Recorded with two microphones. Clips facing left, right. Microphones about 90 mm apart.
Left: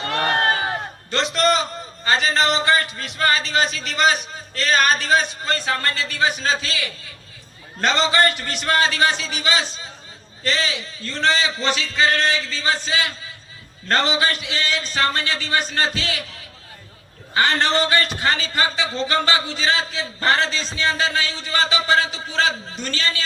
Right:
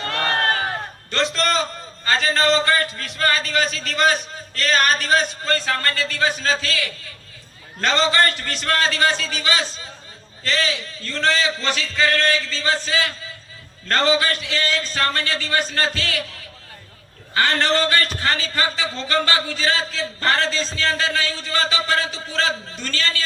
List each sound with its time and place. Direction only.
0.0 s crowd: 20° left (ahead or behind)
1.1 s a sound: 20° left (ahead or behind)
2.0 s a man's voice: 20° left (ahead or behind)
17.3 s a man's voice: 20° left (ahead or behind)